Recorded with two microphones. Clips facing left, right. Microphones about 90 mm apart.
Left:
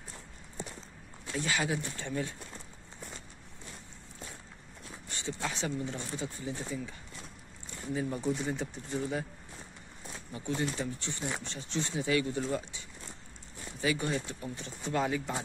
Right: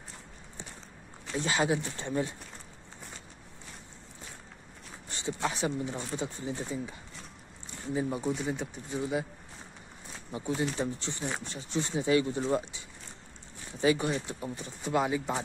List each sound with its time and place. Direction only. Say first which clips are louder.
1.3 s speech: right 4 dB; 25° right (ahead or behind)
5.1 s speech: right 4 dB; 20° right (ahead or behind)
8.2 s speech: right 1 dB; 5° right (ahead or behind)
10.3 s speech: right 2 dB; 20° right (ahead or behind)